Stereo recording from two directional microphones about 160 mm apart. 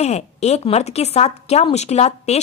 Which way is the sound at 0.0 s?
45° left (ahead or behind).